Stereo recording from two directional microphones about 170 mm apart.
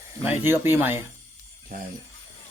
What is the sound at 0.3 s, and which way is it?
Speech, 15° right (ahead or behind).